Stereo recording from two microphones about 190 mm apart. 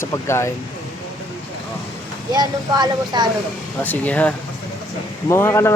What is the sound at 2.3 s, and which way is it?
Speech, 20° right (ahead or behind).